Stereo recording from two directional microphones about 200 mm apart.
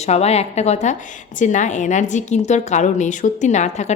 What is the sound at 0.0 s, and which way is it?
A woman's voice, 30° left (ahead or behind).